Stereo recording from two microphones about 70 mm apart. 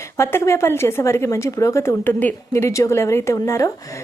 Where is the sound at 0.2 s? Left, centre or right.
Left.